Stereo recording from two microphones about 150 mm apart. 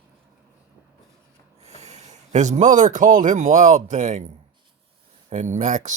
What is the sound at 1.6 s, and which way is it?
Speech, 45° right (ahead or behind).